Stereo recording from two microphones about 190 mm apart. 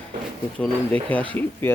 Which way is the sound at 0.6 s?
5° left (ahead or behind).